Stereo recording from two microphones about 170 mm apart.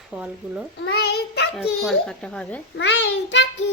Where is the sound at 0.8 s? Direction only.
70° left (ahead or behind).